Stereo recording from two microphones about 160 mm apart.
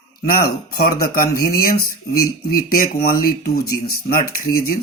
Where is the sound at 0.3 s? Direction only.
65° left (ahead or behind).